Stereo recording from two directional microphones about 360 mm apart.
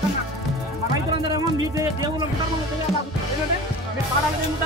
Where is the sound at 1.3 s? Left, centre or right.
Centre.